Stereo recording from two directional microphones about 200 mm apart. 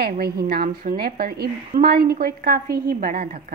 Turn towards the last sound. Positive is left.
turn(degrees=-45)  # may be behind; listen again after turning